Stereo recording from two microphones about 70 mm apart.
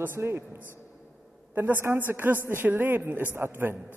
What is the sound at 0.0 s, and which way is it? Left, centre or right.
Speech, right.